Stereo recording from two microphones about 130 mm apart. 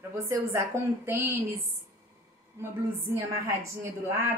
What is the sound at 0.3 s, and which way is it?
A woman's voice, 20° right (ahead or behind).